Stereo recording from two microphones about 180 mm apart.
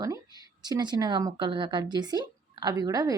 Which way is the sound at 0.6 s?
25° right (ahead or behind).